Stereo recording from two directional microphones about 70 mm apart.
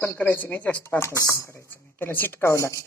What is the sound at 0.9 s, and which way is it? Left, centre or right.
Speech, left.